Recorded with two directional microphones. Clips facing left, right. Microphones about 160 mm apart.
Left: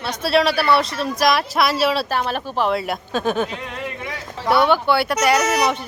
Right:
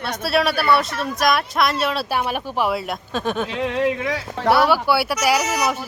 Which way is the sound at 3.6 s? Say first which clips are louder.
Right 9 dB; 90° right.